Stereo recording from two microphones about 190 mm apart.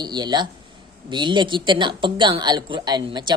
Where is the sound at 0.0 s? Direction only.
20° right (ahead or behind).